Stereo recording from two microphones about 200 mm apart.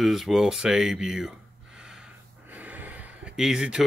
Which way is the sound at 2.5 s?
10° right (ahead or behind).